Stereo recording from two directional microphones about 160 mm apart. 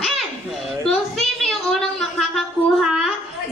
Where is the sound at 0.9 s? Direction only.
Centre (ahead or behind).